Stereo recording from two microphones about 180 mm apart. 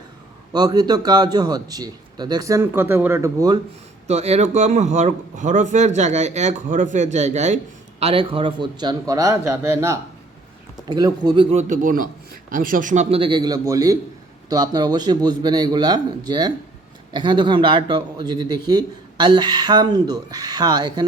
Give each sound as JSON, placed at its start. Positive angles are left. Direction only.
{"t": 0.5, "sound": "speech", "side_deg": -20}
{"t": 4.0, "sound": "a man's voice", "side_deg": -40}
{"t": 11.5, "sound": "a man's voice", "side_deg": -45}